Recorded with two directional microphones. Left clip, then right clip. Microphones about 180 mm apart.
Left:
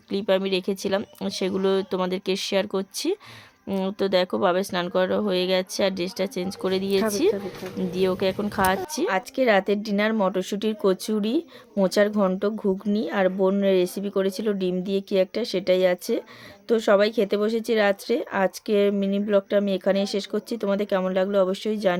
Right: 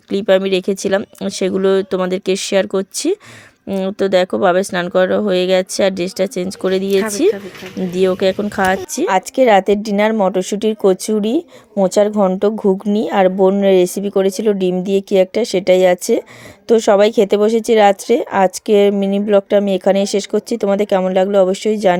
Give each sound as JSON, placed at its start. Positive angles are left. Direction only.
{"t": 0.1, "sound": "speech", "side_deg": -30}
{"t": 9.0, "sound": "speech", "side_deg": -40}